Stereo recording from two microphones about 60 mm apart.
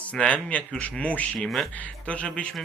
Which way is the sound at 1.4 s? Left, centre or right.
Centre.